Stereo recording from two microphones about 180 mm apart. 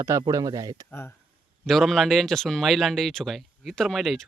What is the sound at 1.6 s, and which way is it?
Speech, centre (ahead or behind).